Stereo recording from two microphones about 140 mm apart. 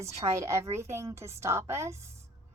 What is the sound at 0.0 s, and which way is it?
A woman's voice, 20° right (ahead or behind).